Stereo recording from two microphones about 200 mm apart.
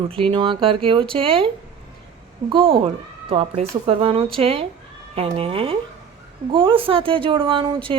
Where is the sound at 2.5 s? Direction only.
25° right (ahead or behind).